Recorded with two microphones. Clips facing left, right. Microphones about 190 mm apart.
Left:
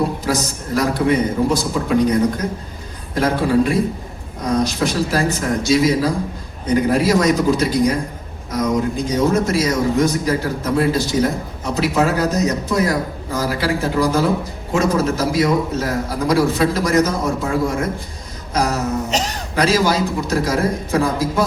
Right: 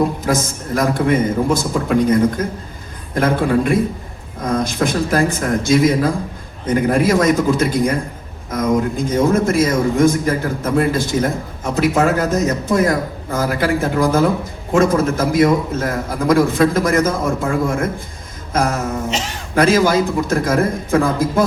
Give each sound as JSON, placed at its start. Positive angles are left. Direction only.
{"t": 0.3, "sound": "a man's voice", "side_deg": -50}
{"t": 3.2, "sound": "a man's voice", "side_deg": -50}
{"t": 19.1, "sound": "a man's voice", "side_deg": 40}
{"t": 19.5, "sound": "a man's voice", "side_deg": -50}